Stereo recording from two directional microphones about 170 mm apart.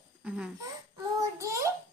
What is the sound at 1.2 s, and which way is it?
Child singing, 20° right (ahead or behind).